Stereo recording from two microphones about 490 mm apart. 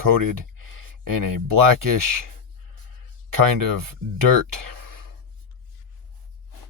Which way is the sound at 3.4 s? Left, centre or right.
Right.